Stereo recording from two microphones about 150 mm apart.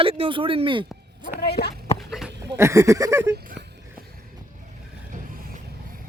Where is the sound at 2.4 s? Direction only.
20° right (ahead or behind).